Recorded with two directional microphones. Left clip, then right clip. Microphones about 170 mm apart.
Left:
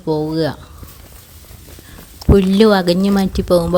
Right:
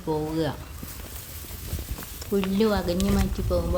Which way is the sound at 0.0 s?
30° left (ahead or behind).